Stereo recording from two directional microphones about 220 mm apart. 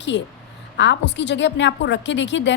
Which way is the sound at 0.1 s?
55° left (ahead or behind).